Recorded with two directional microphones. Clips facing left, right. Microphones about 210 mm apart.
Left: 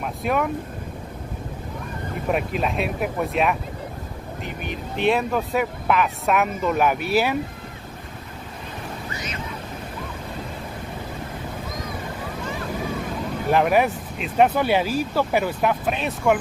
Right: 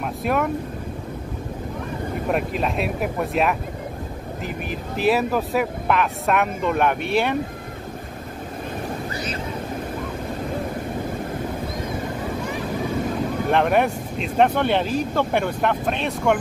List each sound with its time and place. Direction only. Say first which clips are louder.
0.0 s speech: right 1 dB; centre (ahead or behind)
2.2 s speech: even; centre (ahead or behind)
4.6 s speech: right 1 dB; 5° right (ahead or behind)
9.1 s vehicle: right 4 dB; 30° right (ahead or behind)
13.5 s speech: left 1 dB; 5° left (ahead or behind)